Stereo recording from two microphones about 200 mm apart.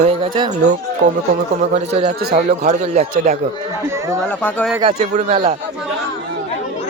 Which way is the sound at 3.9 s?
15° right (ahead or behind).